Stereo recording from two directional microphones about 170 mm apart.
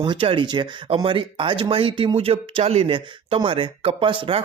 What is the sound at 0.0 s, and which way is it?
Speech, 30° right (ahead or behind).